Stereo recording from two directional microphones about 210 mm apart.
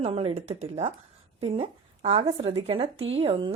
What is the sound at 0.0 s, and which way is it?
A woman's voice, 30° right (ahead or behind).